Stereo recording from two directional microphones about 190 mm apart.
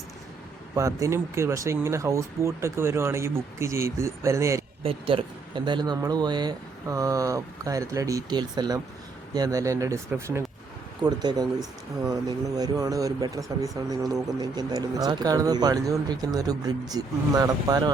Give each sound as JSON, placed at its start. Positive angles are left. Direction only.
{"t": 0.8, "sound": "speech", "side_deg": -15}
{"t": 4.8, "sound": "speech", "side_deg": -30}